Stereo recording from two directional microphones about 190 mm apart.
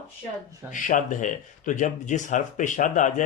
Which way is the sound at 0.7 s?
40° left (ahead or behind).